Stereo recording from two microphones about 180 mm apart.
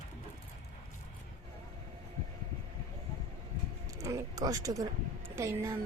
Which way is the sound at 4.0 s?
20° right (ahead or behind).